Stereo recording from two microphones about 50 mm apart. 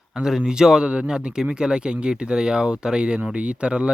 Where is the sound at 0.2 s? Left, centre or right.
Centre.